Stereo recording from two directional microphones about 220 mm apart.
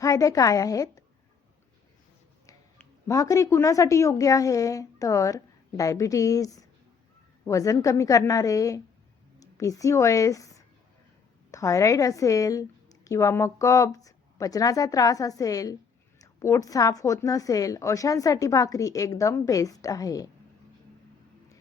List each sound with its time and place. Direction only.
0.0 s a woman's voice: 15° left (ahead or behind)
2.5 s a woman's voice: 15° left (ahead or behind)